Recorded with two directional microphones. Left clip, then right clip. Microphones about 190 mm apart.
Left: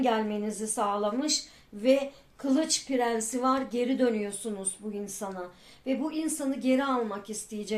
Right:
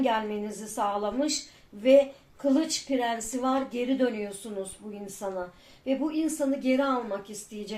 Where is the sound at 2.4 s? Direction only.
45° left (ahead or behind).